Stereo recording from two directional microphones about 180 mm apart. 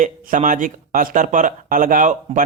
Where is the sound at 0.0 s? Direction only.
45° right (ahead or behind).